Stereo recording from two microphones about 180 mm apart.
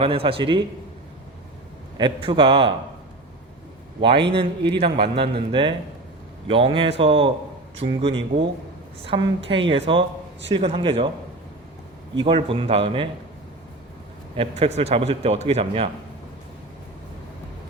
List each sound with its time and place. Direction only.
0.0 s a woman's voice: 30° right (ahead or behind)
2.0 s a woman's voice: 25° right (ahead or behind)
4.3 s a man's voice: 30° right (ahead or behind)
12.1 s a woman's voice: 30° right (ahead or behind)
14.3 s a man's voice: 30° right (ahead or behind)